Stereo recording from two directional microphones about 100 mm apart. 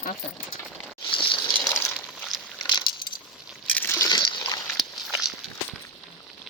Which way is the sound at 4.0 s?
50° left (ahead or behind).